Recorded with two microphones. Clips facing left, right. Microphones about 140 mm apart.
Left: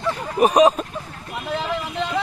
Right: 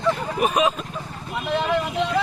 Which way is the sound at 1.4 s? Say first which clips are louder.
Right 3 dB; centre (ahead or behind).